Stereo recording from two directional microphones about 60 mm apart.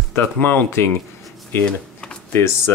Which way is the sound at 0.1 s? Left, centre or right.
Left.